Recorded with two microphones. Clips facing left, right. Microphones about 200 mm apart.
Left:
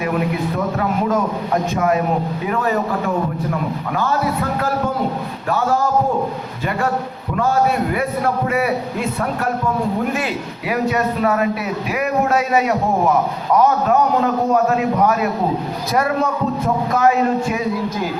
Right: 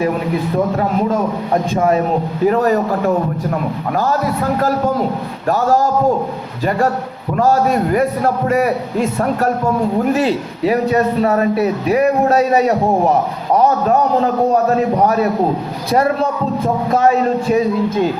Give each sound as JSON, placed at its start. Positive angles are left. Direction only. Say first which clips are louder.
{"t": 1.7, "sound": "a man's voice", "louder": "right 4 dB", "side_deg": -30}
{"t": 3.9, "sound": "a man's voice", "louder": "right 3 dB", "side_deg": -40}
{"t": 5.5, "sound": "a man's voice", "louder": "right 4 dB", "side_deg": -40}
{"t": 7.3, "sound": "a man's voice", "louder": "right 3 dB", "side_deg": -40}
{"t": 15.0, "sound": "a man's voice", "louder": "right 3 dB", "side_deg": -35}